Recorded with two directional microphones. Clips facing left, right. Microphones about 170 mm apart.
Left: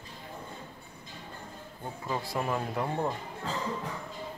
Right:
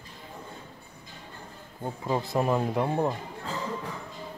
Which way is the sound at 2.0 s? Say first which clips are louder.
Right 6 dB; 25° right (ahead or behind).